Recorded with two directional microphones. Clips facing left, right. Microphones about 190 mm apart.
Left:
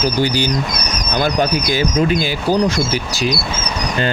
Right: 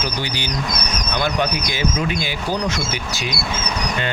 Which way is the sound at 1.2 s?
40° left (ahead or behind).